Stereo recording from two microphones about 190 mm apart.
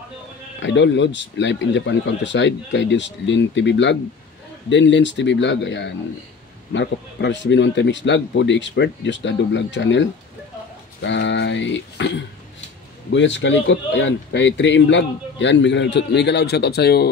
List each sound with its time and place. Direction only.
0.6 s speech: 70° left (ahead or behind)
13.1 s speech: 70° left (ahead or behind)